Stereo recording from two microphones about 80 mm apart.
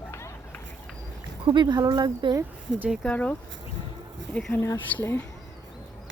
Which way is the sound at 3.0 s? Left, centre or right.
Centre.